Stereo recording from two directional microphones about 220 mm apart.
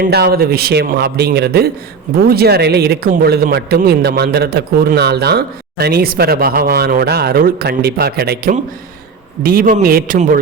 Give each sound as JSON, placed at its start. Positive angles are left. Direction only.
{"t": 0.0, "sound": "a man's voice", "side_deg": -45}